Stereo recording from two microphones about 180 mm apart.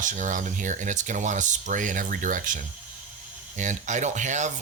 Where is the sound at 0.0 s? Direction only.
45° right (ahead or behind).